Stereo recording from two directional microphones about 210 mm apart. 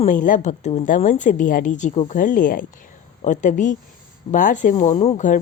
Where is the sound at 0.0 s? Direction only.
40° left (ahead or behind).